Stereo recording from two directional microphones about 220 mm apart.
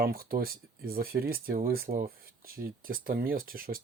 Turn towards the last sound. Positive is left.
turn(degrees=-40)  # may be behind; listen again after turning